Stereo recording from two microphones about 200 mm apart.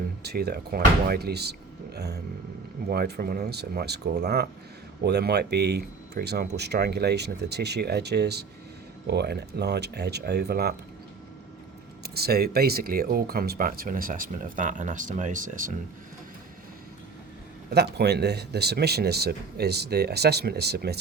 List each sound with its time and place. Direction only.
0.2 s speech: 55° right (ahead or behind)
12.0 s speech: 50° right (ahead or behind)
17.7 s speech: 55° right (ahead or behind)